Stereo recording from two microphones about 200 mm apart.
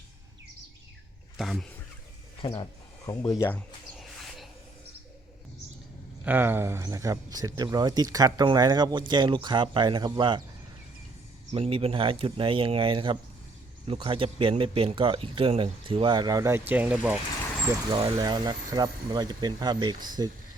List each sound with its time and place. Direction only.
1.4 s a sound: centre (ahead or behind)
2.4 s speech: 25° left (ahead or behind)
3.9 s music: centre (ahead or behind)
6.2 s speech: 10° right (ahead or behind)
11.5 s speech: 30° right (ahead or behind); by 17.2 s 5° right (ahead or behind)
17.9 s speech: 25° right (ahead or behind)